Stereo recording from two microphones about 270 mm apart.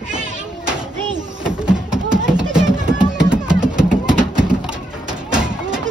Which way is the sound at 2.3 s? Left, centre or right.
Centre.